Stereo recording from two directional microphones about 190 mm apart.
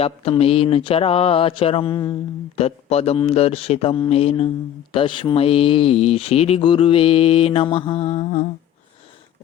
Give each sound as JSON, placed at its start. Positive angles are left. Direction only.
{"t": 0.0, "sound": "speech", "side_deg": 30}